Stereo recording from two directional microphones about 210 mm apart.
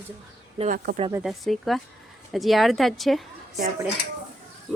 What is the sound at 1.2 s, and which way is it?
A woman's voice, centre (ahead or behind).